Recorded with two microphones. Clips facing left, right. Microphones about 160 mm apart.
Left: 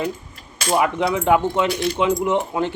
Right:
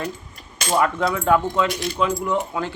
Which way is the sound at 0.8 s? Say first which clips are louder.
Left 1 dB; 20° left (ahead or behind).